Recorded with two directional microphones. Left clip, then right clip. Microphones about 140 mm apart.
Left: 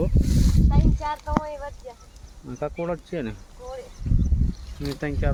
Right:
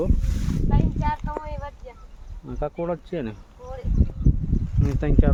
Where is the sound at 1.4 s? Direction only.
45° left (ahead or behind).